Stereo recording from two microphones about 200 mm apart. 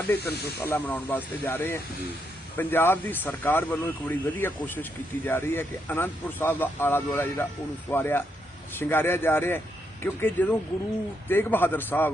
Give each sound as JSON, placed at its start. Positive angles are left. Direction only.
{"t": 0.2, "sound": "speech", "side_deg": 55}
{"t": 0.6, "sound": "speech", "side_deg": 10}